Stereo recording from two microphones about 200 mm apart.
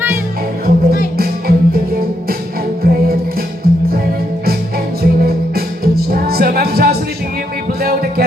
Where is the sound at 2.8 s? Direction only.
50° right (ahead or behind).